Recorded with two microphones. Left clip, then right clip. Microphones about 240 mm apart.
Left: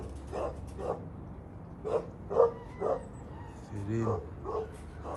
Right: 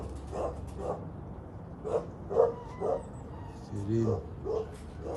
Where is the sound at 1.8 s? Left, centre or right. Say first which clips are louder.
Even; right.